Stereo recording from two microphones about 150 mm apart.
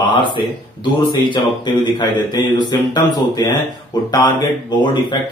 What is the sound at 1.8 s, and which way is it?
Speech, 30° left (ahead or behind).